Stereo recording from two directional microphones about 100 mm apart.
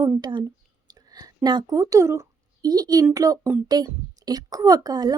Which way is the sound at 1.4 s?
40° right (ahead or behind).